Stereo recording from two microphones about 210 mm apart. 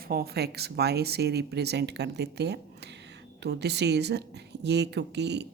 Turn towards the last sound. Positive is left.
turn(degrees=-55)  # may be behind; listen again after turning